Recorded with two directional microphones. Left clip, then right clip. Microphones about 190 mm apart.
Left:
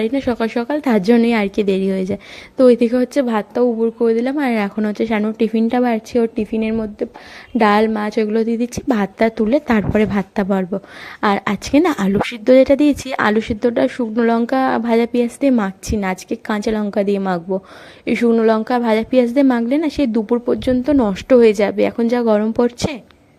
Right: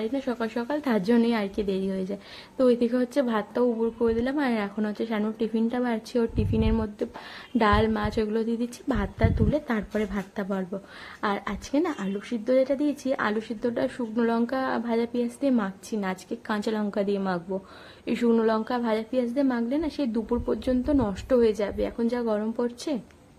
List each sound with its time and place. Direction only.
0.0 s speech: 35° left (ahead or behind)